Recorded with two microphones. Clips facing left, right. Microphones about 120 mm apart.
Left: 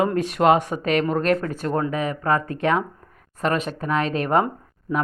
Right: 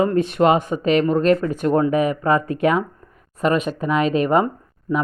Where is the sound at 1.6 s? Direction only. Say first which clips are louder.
Right 6 dB; 15° right (ahead or behind); by 5.0 s 5° left (ahead or behind).